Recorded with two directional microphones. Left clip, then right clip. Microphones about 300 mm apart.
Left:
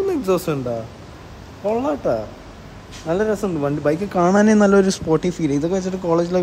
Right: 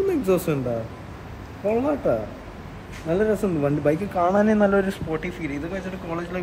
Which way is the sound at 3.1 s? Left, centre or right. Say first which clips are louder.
Left 2 dB; centre.